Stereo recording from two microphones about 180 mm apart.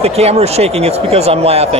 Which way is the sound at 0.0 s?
35° right (ahead or behind).